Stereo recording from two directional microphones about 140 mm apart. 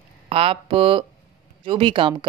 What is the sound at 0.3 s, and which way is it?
A woman's voice, 40° right (ahead or behind).